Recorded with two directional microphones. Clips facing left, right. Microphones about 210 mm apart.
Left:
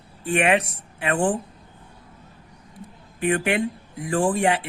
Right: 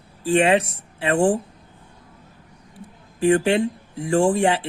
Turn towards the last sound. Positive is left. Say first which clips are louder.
# right 3 dB
turn(degrees=-30)  # may be behind; listen again after turning